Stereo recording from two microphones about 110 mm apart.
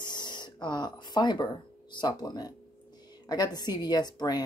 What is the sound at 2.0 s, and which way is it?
A woman's voice, 40° left (ahead or behind).